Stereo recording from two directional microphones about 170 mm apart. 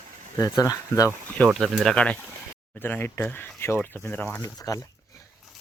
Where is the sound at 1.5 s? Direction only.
Centre (ahead or behind).